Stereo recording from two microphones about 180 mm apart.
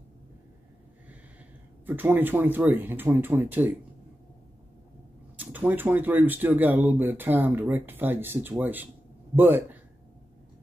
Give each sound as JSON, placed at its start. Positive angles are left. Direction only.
{"t": 1.9, "sound": "speech", "side_deg": -10}
{"t": 5.4, "sound": "speech", "side_deg": -10}